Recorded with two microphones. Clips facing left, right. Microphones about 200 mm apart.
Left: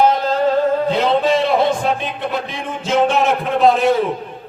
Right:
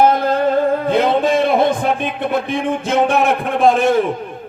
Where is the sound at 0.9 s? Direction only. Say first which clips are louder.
Right 1 dB; 50° right (ahead or behind).